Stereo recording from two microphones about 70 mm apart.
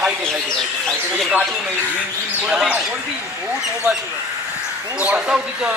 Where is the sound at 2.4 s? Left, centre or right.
Centre.